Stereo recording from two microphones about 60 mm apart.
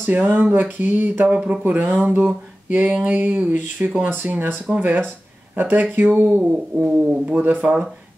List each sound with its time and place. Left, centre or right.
0.0 s speech: right